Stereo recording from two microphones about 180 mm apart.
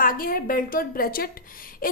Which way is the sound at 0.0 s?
55° left (ahead or behind).